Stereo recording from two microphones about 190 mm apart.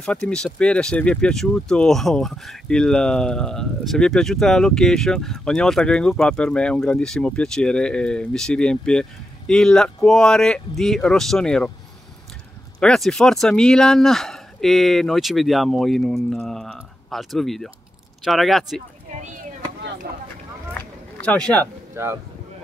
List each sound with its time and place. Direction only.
0.0 s speech: 5° left (ahead or behind)
12.8 s speech: 5° left (ahead or behind)
20.1 s speech: 55° right (ahead or behind)
20.7 s a sound: 10° left (ahead or behind)
21.9 s speech: 10° right (ahead or behind)